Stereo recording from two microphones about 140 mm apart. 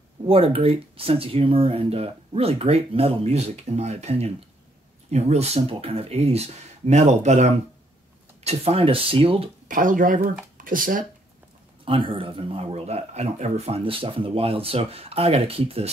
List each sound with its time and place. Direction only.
0.3 s speech: 45° right (ahead or behind)
9.7 s speech: 75° right (ahead or behind)
11.8 s speech: 40° right (ahead or behind)